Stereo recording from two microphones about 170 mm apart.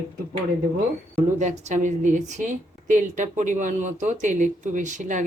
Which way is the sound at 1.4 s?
45° right (ahead or behind).